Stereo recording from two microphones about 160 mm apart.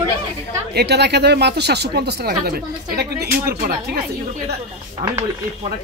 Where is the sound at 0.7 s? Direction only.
90° right; by 4.0 s 70° right (ahead or behind).